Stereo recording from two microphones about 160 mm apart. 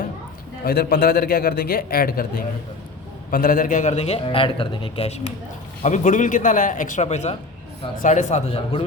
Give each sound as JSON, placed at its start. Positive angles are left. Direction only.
{"t": 0.6, "sound": "a man's voice", "side_deg": 75}
{"t": 5.8, "sound": "a man's voice", "side_deg": 50}